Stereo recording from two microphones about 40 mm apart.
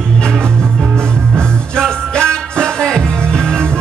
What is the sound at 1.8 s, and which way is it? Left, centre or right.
Music, centre.